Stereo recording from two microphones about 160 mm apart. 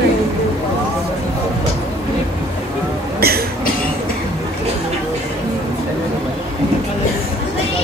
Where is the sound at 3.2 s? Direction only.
75° right (ahead or behind).